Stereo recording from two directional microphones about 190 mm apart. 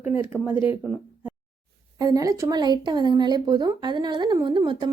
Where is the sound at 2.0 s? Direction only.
20° right (ahead or behind).